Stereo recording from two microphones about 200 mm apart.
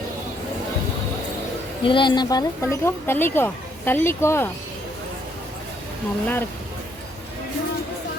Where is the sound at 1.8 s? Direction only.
25° left (ahead or behind).